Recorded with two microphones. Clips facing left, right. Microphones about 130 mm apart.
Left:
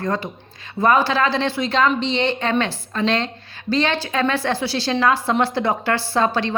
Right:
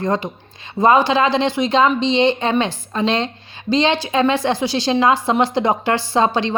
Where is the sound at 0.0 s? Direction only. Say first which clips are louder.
Right 3 dB; 20° right (ahead or behind).